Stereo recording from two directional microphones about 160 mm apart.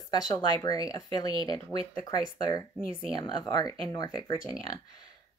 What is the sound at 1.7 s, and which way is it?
Speech, 35° right (ahead or behind).